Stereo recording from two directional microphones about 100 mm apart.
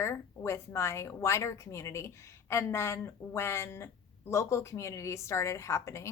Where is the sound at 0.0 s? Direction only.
25° left (ahead or behind).